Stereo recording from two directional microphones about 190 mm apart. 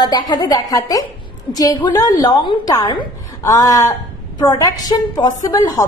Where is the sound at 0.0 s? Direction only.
20° left (ahead or behind).